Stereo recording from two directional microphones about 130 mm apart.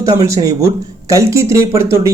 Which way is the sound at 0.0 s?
25° right (ahead or behind).